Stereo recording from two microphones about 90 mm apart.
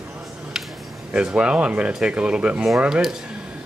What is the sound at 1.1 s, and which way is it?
Speech, 10° right (ahead or behind).